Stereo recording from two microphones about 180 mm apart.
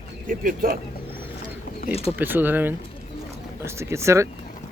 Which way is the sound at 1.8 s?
35° left (ahead or behind).